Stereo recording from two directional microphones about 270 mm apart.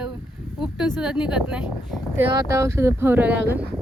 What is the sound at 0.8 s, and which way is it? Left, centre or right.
Speech, centre.